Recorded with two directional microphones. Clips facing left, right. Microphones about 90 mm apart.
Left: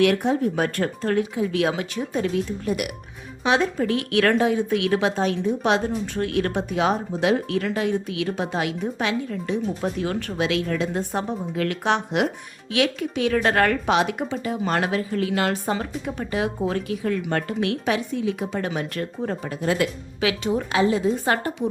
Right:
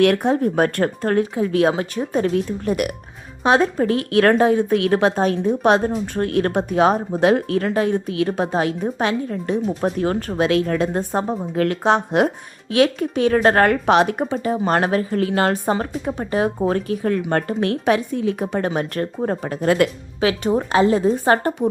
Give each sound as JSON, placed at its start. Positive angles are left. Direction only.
{"t": 0.0, "sound": "speech", "side_deg": -50}
{"t": 13.8, "sound": "speech", "side_deg": -45}
{"t": 19.6, "sound": "speech", "side_deg": -60}
{"t": 20.2, "sound": "speech", "side_deg": -40}